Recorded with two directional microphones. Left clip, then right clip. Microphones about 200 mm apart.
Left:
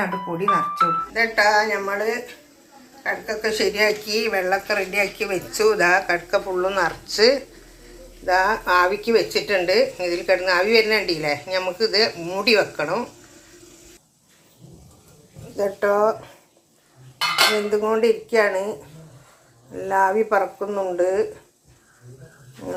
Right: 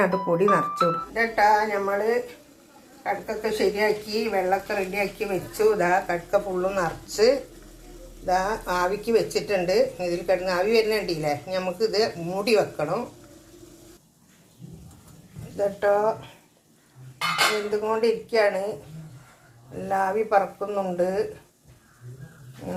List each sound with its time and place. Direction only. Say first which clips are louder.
0.0 s speech: right 3 dB; 55° right (ahead or behind)
1.1 s a woman's voice: left 1 dB; 5° right (ahead or behind)
15.5 s speech: left 2 dB; 15° left (ahead or behind)
17.7 s speech: left 4 dB; 15° left (ahead or behind)
19.9 s speech: left 4 dB; 15° left (ahead or behind)